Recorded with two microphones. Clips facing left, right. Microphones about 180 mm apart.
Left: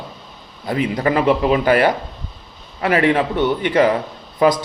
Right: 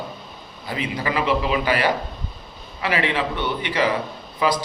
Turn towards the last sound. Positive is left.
turn(degrees=50)  # may be behind; listen again after turning